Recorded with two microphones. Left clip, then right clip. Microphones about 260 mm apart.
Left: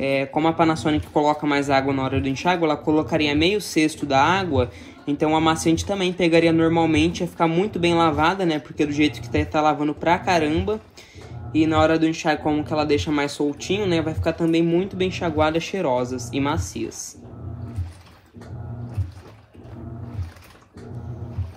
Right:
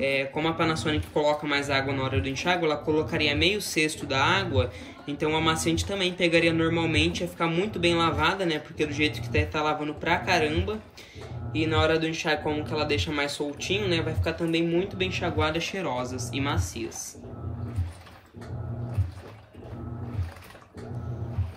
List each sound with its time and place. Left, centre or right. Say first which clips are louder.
0.0 s speech: left 5 dB; centre